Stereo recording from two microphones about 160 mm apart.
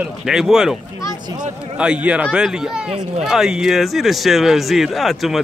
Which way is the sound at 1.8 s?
5° right (ahead or behind).